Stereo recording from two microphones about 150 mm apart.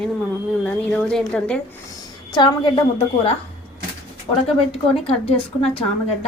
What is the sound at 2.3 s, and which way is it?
A woman's voice, 30° left (ahead or behind).